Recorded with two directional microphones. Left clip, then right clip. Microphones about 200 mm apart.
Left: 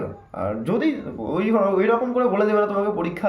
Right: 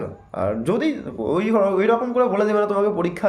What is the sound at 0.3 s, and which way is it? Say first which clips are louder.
Speech: right 3 dB; 50° right (ahead or behind).